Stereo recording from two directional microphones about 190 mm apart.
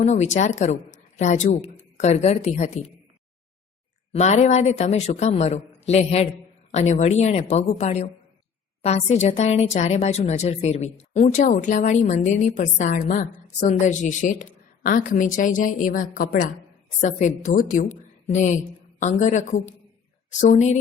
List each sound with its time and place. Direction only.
0.0 s speech: 35° left (ahead or behind)
4.1 s a woman's voice: 35° left (ahead or behind)